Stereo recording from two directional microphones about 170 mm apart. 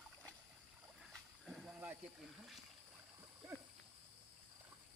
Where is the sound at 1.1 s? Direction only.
Centre (ahead or behind).